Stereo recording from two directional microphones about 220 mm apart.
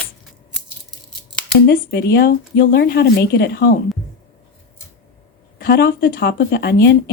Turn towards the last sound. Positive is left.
turn(degrees=45)  # may be behind; listen again after turning